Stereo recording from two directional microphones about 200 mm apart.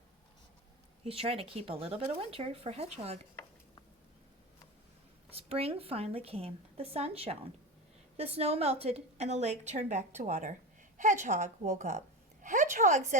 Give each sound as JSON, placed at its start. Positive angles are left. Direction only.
{"t": 1.0, "sound": "speech", "side_deg": -30}
{"t": 5.3, "sound": "a woman's voice", "side_deg": -30}